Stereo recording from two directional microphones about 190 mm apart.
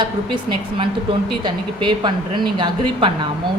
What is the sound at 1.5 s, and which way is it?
A woman's voice, 25° right (ahead or behind).